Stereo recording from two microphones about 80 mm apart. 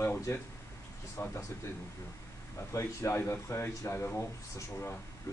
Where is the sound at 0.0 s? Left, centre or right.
Left.